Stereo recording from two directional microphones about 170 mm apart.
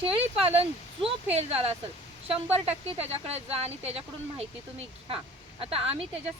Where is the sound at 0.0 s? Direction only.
35° right (ahead or behind).